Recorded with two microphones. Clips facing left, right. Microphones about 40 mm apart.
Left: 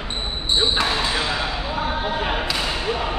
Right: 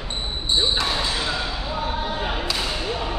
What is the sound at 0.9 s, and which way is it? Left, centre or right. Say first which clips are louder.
Basketball bounce: left 2 dB; left.